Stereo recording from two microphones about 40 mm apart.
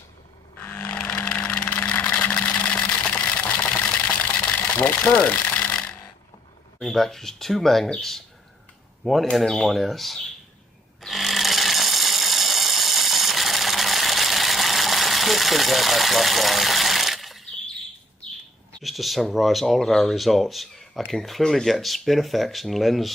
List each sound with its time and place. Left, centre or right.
0.6 s a sound: left
0.8 s music: left
1.3 s vehicle: left
2.0 s engine: left
4.5 s speech: left
5.6 s a sound: left
6.9 s speech: centre
9.3 s speech: centre
11.0 s a sound: centre
18.8 s speech: centre